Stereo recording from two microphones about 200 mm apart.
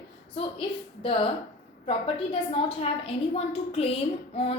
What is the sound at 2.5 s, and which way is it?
A woman's voice, 30° left (ahead or behind).